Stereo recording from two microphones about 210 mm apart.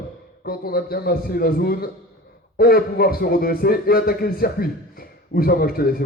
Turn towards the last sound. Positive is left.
turn(degrees=45)  # may be behind; listen again after turning